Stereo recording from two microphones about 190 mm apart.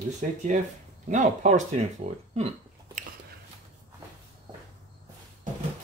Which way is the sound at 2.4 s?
35° right (ahead or behind).